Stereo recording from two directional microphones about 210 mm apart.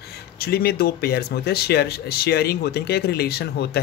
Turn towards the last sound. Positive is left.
turn(degrees=50)  # may be behind; listen again after turning